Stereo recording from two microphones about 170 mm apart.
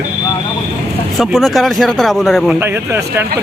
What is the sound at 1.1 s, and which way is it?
A man's voice, centre (ahead or behind).